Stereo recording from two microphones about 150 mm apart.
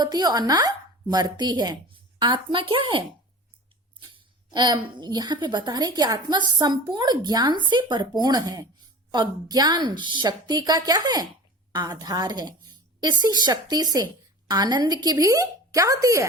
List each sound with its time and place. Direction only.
0.0 s speech: 25° right (ahead or behind)
4.1 s a woman's voice: 30° right (ahead or behind)